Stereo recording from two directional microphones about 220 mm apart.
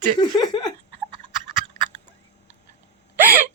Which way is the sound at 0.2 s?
20° left (ahead or behind).